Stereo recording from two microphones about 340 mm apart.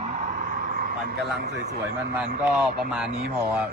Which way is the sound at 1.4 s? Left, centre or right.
Right.